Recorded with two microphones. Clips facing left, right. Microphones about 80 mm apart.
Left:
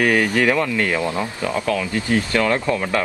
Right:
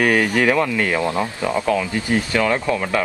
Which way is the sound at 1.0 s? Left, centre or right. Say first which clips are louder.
Right 2 dB; centre.